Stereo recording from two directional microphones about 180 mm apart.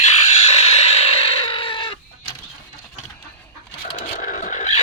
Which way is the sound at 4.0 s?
45° left (ahead or behind).